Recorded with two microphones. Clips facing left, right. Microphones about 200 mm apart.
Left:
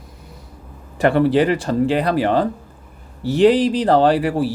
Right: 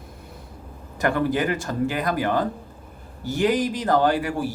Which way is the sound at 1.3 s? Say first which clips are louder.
Left 8 dB; 30° left (ahead or behind).